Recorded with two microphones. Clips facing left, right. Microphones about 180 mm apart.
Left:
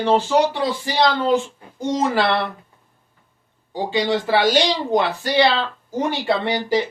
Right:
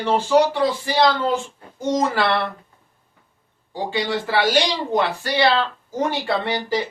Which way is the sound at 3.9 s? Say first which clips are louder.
Left 3 dB; 20° left (ahead or behind).